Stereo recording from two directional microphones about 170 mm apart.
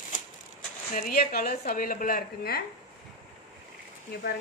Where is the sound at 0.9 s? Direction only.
55° left (ahead or behind).